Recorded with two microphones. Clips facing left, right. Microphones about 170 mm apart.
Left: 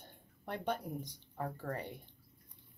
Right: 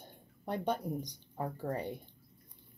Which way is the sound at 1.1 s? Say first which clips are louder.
Right 2 dB; 15° right (ahead or behind).